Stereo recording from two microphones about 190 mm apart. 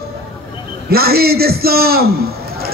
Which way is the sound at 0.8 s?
55° right (ahead or behind).